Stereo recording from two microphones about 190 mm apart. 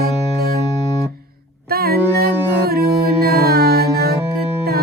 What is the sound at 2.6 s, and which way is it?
Music, 55° right (ahead or behind).